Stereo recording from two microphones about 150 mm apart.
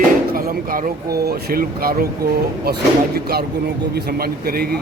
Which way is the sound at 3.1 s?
90° right.